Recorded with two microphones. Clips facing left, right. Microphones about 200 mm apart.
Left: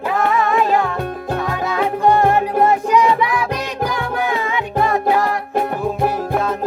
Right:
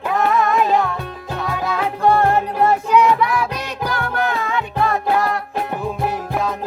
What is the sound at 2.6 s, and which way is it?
Music, 10° left (ahead or behind).